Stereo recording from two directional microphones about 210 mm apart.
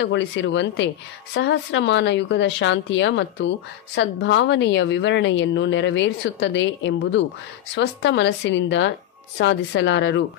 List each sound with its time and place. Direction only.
0.0 s a woman's voice: 60° left (ahead or behind)